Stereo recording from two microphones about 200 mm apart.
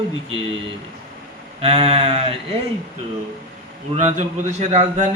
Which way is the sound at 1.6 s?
30° right (ahead or behind).